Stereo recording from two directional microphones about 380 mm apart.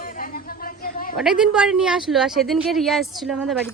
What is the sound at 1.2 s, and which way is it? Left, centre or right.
Speech, centre.